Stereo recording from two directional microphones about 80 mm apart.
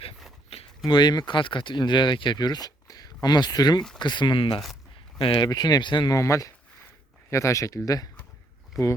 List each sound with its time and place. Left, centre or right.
0.9 s speech: left
3.9 s speech: left
4.6 s a sound: centre
5.2 s speech: left
5.5 s speech: left
6.1 s speech: left